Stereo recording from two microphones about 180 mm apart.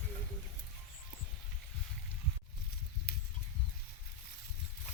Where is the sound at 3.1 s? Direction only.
60° left (ahead or behind).